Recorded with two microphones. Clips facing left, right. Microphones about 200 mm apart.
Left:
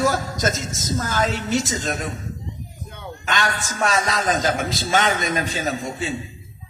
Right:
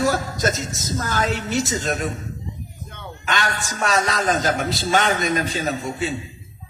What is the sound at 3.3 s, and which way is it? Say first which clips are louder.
A woman's voice: even; 40° right (ahead or behind).